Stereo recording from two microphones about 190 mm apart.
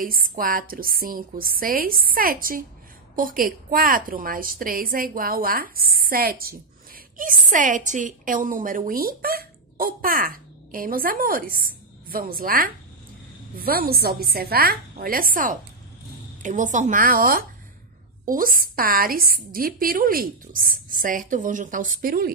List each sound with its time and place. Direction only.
0.0 s a woman's voice: 50° right (ahead or behind)
7.5 s a woman's voice: 45° right (ahead or behind)